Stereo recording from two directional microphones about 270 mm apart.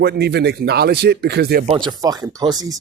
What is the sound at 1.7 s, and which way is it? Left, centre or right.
Speech, centre.